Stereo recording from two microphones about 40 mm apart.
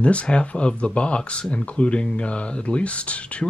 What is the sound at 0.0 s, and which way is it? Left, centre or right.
Speech, left.